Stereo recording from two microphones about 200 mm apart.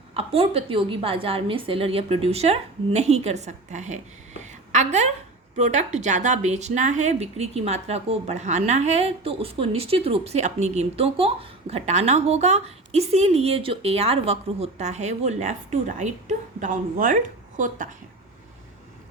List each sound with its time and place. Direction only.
0.1 s a woman's voice: 30° right (ahead or behind)